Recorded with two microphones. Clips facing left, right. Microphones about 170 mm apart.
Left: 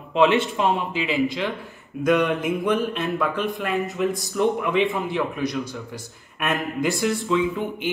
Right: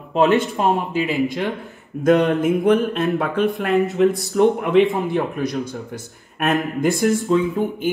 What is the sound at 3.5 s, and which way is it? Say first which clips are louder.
A man's voice: right 7 dB; 65° right (ahead or behind).